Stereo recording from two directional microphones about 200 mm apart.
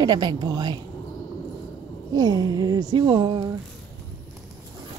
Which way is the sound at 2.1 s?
20° right (ahead or behind).